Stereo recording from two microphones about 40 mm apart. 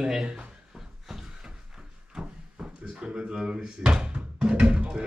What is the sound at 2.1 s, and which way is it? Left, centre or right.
Drawer open or close, right.